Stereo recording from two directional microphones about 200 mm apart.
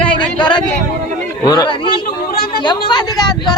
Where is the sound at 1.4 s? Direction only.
20° left (ahead or behind).